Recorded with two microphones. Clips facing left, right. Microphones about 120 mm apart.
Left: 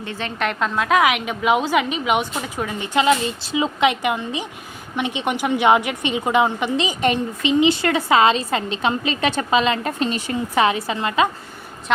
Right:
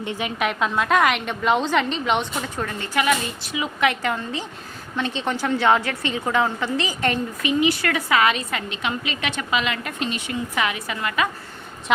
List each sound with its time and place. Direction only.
0.0 s a woman's voice: 15° right (ahead or behind); by 11.3 s 25° left (ahead or behind)
11.9 s a woman's voice: 5° right (ahead or behind)